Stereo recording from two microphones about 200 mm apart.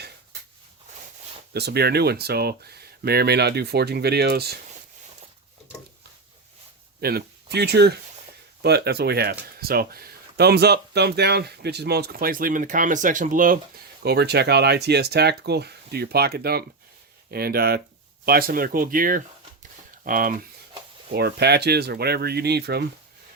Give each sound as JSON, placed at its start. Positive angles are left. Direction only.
{"t": 1.5, "sound": "speech", "side_deg": -55}
{"t": 7.0, "sound": "speech", "side_deg": -50}
{"t": 14.0, "sound": "speech", "side_deg": -55}
{"t": 21.1, "sound": "speech", "side_deg": -55}